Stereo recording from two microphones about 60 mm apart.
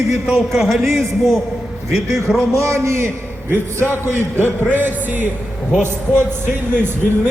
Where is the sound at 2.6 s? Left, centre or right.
Right.